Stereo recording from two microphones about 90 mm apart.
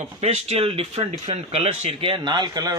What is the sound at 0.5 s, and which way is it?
Speech, 90° right.